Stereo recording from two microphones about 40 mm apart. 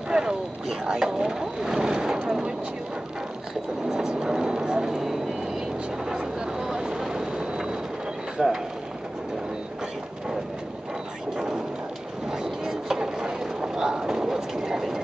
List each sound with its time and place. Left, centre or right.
0.1 s speech: centre
3.9 s speech: centre
4.8 s speech: centre
11.3 s a sound: centre
12.3 s boat: centre